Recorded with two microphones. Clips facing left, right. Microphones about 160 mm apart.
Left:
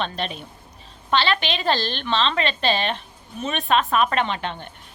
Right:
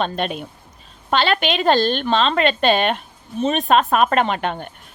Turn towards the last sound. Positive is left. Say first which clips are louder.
# right 5 dB
turn(degrees=-50)  # may be behind; listen again after turning